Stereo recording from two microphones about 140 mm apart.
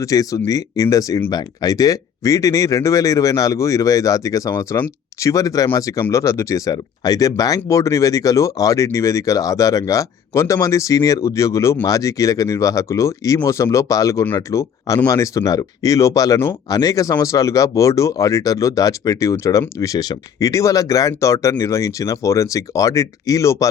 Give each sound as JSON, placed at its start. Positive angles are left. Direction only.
{"t": 0.0, "sound": "speech", "side_deg": 25}